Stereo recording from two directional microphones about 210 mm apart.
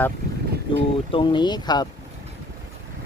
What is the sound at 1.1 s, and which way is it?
Speech, 25° left (ahead or behind).